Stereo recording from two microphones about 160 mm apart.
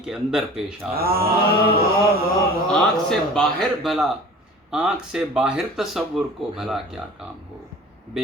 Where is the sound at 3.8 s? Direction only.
Centre (ahead or behind).